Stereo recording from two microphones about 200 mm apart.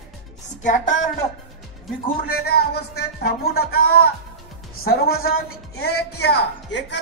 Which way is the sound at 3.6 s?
50° left (ahead or behind).